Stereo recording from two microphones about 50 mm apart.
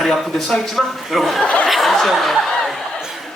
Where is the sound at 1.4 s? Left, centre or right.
Left.